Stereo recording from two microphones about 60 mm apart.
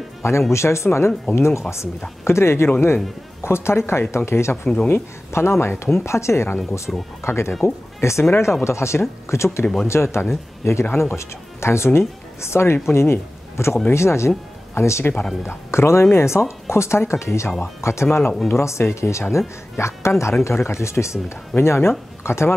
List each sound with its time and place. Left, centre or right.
0.2 s speech: left
6.9 s speech: centre
7.2 s speech: left